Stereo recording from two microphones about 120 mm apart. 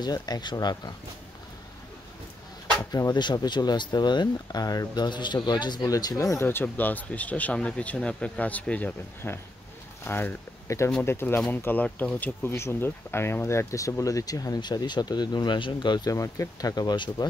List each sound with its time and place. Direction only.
0.0 s speech: 35° left (ahead or behind)
2.8 s speech: 30° left (ahead or behind)